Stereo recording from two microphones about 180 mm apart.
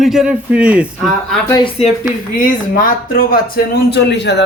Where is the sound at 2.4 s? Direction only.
50° left (ahead or behind).